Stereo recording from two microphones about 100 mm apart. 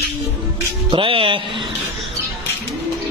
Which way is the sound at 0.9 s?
60° right (ahead or behind).